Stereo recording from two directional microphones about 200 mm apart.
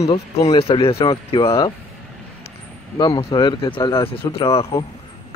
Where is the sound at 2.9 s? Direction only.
20° left (ahead or behind).